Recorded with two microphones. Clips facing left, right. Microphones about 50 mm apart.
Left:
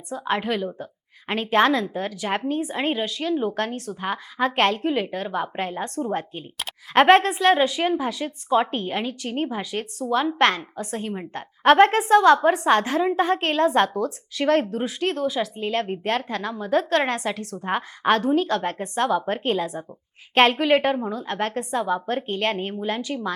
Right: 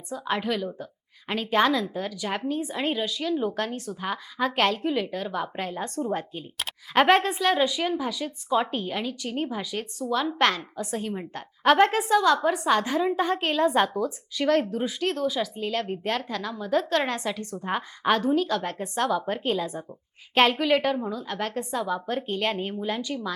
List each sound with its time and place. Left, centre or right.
0.1 s a woman's voice: left
6.6 s a sound: centre
7.1 s a woman's voice: left
13.7 s a woman's voice: centre
14.3 s a woman's voice: left
20.4 s a woman's voice: left